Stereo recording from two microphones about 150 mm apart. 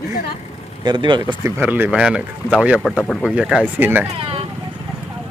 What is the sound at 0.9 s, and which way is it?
Speech, 30° right (ahead or behind).